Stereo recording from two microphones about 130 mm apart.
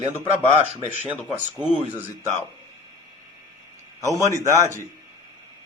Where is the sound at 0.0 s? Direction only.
50° right (ahead or behind).